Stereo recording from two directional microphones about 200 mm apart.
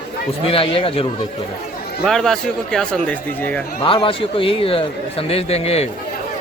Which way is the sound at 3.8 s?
25° left (ahead or behind).